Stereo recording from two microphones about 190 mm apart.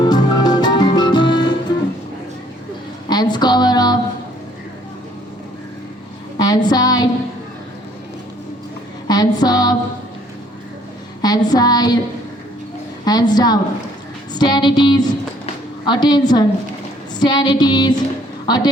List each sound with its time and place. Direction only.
0.0 s music: 20° left (ahead or behind)
3.1 s music: 20° left (ahead or behind)
6.4 s a sound: 20° left (ahead or behind)
9.0 s music: 20° left (ahead or behind)
11.2 s child singing: 20° left (ahead or behind)
13.1 s a sound: 20° left (ahead or behind)
15.9 s music: 20° left (ahead or behind)
18.4 s a woman's voice: 20° left (ahead or behind)